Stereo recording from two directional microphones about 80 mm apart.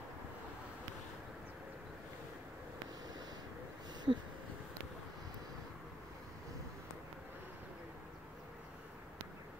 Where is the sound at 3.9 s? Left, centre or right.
Right.